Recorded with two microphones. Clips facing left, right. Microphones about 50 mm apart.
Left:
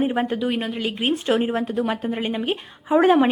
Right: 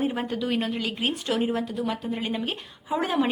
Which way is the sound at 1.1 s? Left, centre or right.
Left.